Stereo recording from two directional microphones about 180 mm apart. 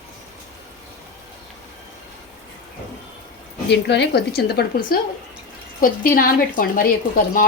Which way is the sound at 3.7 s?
70° left (ahead or behind).